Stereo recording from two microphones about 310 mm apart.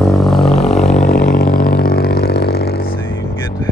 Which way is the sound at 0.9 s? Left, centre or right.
Left.